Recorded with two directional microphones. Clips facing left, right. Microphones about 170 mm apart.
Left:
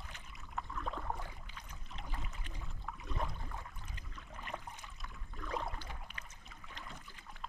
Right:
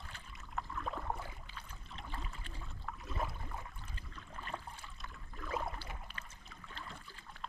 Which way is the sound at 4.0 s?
15° left (ahead or behind).